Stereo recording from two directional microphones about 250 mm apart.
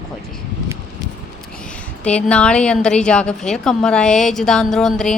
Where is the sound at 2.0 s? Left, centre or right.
Centre.